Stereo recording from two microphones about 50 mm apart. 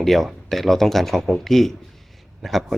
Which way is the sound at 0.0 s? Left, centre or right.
Centre.